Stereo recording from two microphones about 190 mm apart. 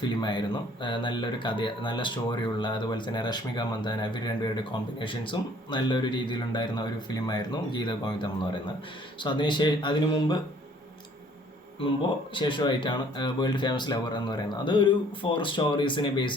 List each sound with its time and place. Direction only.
0.0 s speech: 25° left (ahead or behind)
12.3 s speech: 25° left (ahead or behind)